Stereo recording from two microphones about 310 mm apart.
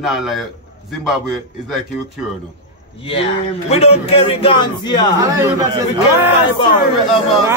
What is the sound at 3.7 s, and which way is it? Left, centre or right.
A man's voice, centre.